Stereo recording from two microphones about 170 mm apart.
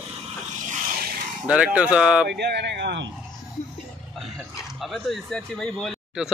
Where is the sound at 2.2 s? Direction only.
80° right.